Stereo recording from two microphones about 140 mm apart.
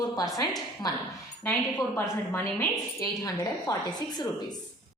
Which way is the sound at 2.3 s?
20° left (ahead or behind).